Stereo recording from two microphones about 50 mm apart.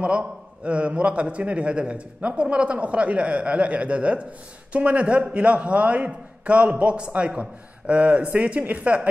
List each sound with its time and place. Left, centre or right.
0.0 s a man's voice: right